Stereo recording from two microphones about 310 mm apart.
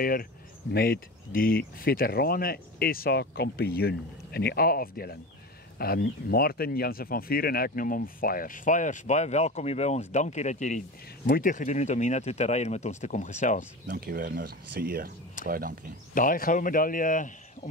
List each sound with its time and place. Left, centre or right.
0.0 s speech: left
13.8 s speech: right
16.2 s speech: left